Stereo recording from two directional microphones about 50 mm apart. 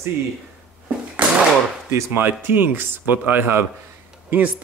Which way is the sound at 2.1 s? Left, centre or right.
Right.